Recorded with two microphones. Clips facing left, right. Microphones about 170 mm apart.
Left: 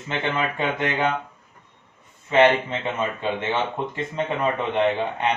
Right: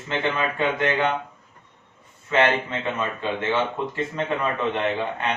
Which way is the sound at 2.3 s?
20° left (ahead or behind).